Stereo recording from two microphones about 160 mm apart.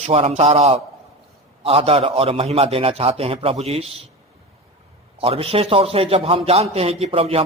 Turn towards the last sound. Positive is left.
turn(degrees=-40)  # may be behind; listen again after turning